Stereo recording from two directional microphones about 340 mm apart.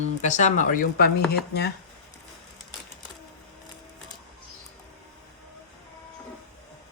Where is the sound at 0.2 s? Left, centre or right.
Left.